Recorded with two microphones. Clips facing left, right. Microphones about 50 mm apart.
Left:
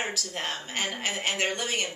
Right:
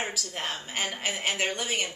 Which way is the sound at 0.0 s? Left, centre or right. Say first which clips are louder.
Left 1 dB; centre.